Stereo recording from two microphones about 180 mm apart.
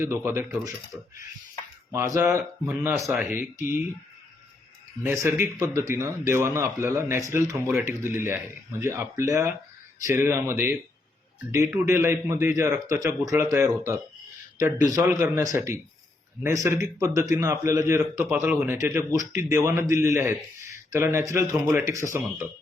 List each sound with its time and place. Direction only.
0.0 s speech: 15° right (ahead or behind)
1.9 s speech: 15° right (ahead or behind)
5.0 s speech: 15° right (ahead or behind)